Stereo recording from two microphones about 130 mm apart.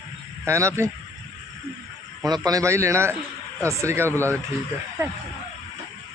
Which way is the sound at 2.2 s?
30° right (ahead or behind).